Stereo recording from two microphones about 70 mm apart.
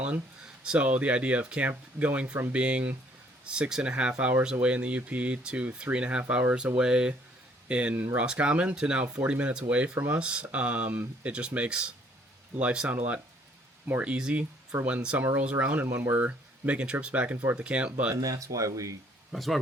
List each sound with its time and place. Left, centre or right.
0.6 s speech: centre
18.1 s speech: right
19.3 s speech: centre